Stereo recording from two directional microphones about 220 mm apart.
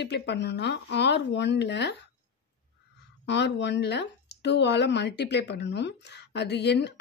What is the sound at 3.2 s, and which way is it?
Speech, 50° left (ahead or behind).